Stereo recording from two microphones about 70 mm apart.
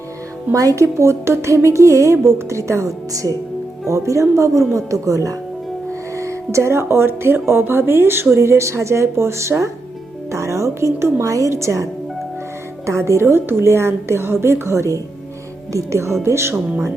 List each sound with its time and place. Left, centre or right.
0.5 s a woman's voice: right